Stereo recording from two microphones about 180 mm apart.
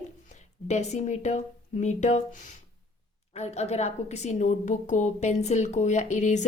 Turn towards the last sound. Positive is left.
turn(degrees=40)  # may be behind; listen again after turning